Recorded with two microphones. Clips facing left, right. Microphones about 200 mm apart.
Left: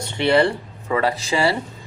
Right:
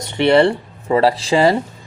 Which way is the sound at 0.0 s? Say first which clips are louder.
Right 4 dB; 20° right (ahead or behind).